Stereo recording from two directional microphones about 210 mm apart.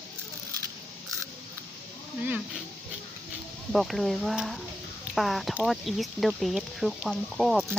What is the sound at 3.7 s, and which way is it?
Speech, centre (ahead or behind).